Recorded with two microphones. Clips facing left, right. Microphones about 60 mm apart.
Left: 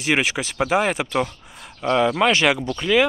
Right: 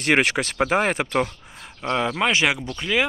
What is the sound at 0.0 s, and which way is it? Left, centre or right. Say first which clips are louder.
Speech: right 2 dB; right.